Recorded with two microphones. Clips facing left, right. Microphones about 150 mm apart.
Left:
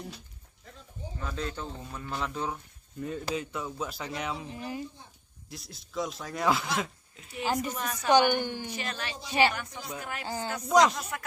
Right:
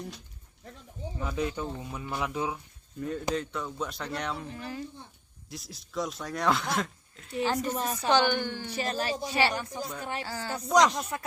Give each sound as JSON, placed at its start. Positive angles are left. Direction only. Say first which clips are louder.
{"t": 1.2, "sound": "speech", "louder": "right 4 dB", "side_deg": -15}
{"t": 3.0, "sound": "speech", "louder": "right 2 dB", "side_deg": 0}
{"t": 4.4, "sound": "a woman's voice", "louder": "left 1 dB", "side_deg": 15}
{"t": 5.5, "sound": "speech", "louder": "right 2 dB", "side_deg": 0}
{"t": 7.8, "sound": "speech", "louder": "right 1 dB", "side_deg": -35}
{"t": 8.1, "sound": "a woman's voice", "louder": "left 3 dB", "side_deg": 15}
{"t": 8.7, "sound": "speech", "louder": "right 6 dB", "side_deg": -40}
{"t": 10.2, "sound": "speech", "louder": "left 3 dB", "side_deg": 20}
{"t": 10.7, "sound": "speech", "louder": "even", "side_deg": 5}
{"t": 11.1, "sound": "speech", "louder": "right 2 dB", "side_deg": -30}